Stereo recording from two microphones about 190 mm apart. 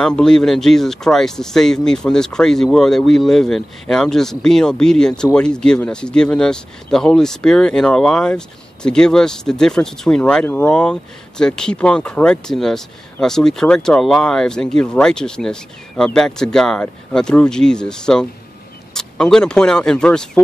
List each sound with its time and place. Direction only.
0.0 s speech: 5° left (ahead or behind)